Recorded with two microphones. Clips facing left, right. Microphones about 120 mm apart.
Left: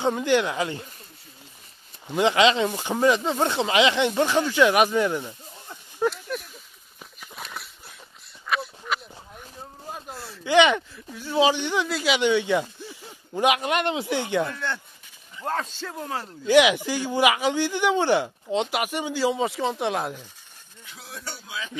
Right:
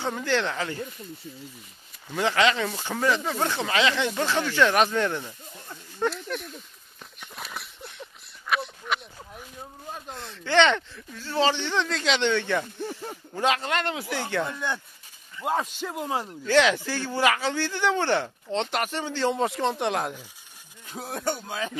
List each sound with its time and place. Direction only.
0.0 s speech: 15° left (ahead or behind)
2.0 s speech: 20° left (ahead or behind)
6.0 s a sound: centre (ahead or behind)
9.9 s speech: 5° left (ahead or behind)
12.8 s a sound: 50° right (ahead or behind)
13.3 s speech: 15° left (ahead or behind)
14.4 s speech: 15° right (ahead or behind)
16.4 s speech: 15° left (ahead or behind)
20.8 s speech: 45° right (ahead or behind)